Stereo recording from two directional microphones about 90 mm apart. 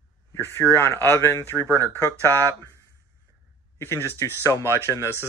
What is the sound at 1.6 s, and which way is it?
Speech, 35° right (ahead or behind).